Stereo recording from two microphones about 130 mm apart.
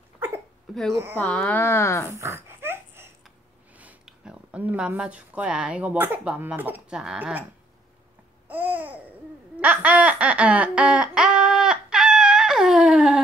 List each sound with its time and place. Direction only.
0.7 s a sound: centre (ahead or behind)
1.1 s speech: 10° left (ahead or behind)
2.0 s dog: 20° right (ahead or behind)
3.7 s speech: 10° right (ahead or behind)
8.5 s babbling: 15° right (ahead or behind)
9.6 s laughter: 10° right (ahead or behind)